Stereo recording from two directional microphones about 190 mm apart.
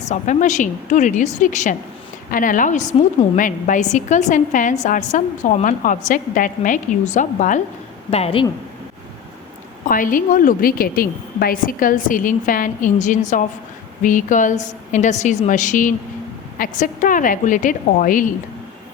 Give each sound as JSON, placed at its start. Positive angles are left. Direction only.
{"t": 0.0, "sound": "a woman's voice", "side_deg": 40}
{"t": 8.1, "sound": "speech", "side_deg": 30}
{"t": 9.8, "sound": "a woman's voice", "side_deg": 45}